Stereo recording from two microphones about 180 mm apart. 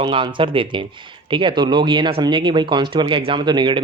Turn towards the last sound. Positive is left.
turn(degrees=-25)  # may be behind; listen again after turning